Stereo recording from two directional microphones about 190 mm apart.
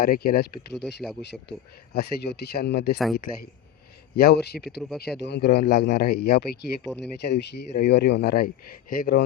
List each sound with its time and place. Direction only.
0.0 s speech: 50° left (ahead or behind)
1.2 s speech: 65° left (ahead or behind)
4.8 s speech: centre (ahead or behind)
5.2 s speech: 60° left (ahead or behind)